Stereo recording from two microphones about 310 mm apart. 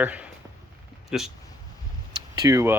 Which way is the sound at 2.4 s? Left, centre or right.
Centre.